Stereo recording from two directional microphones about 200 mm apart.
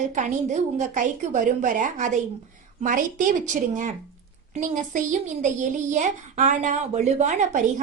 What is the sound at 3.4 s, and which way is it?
A woman's voice, 40° right (ahead or behind).